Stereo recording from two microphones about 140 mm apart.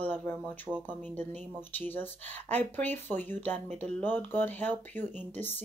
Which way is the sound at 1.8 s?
15° left (ahead or behind).